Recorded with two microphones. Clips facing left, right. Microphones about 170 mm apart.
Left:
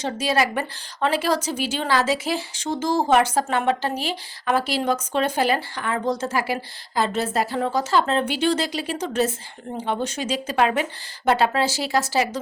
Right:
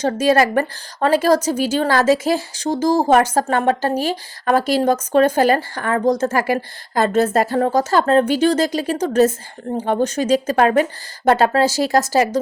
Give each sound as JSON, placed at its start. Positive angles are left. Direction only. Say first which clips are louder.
{"t": 0.0, "sound": "a woman's voice", "louder": "right 7 dB", "side_deg": -45}